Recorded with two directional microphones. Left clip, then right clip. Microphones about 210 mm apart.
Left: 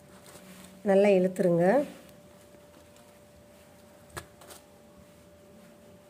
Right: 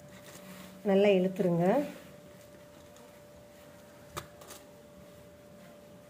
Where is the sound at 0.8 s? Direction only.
30° left (ahead or behind).